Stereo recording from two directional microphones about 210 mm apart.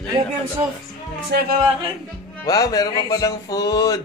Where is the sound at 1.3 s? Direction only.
50° right (ahead or behind).